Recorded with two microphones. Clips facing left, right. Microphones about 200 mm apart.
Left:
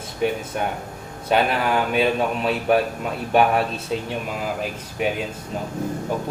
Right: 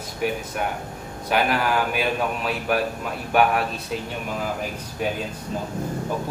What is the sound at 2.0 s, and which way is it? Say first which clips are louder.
Speech: left 4 dB; 25° left (ahead or behind).